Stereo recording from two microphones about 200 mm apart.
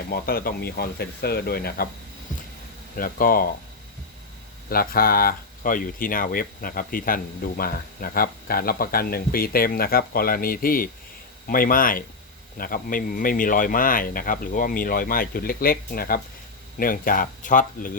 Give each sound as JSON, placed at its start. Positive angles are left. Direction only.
{"t": 0.1, "sound": "speech", "side_deg": 50}
{"t": 2.9, "sound": "speech", "side_deg": 45}
{"t": 4.7, "sound": "speech", "side_deg": 50}